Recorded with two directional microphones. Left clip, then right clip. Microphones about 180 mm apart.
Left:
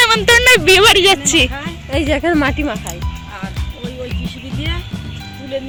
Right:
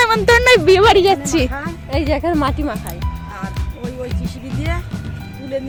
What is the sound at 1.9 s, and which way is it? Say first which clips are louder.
Speech: left 3 dB; 45° left (ahead or behind).